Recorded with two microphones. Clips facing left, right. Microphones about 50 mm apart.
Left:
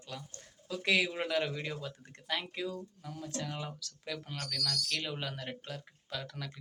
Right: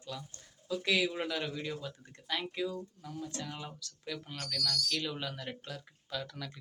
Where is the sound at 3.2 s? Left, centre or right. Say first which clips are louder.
Left 3 dB; left.